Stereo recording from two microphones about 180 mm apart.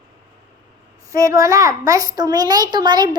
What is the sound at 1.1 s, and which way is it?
A child's voice, 20° right (ahead or behind).